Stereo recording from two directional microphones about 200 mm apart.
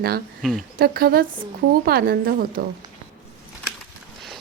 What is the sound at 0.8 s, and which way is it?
A woman's voice, 50° right (ahead or behind).